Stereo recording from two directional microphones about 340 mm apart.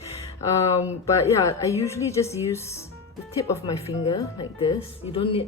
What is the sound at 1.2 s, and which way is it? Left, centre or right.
Speech, centre.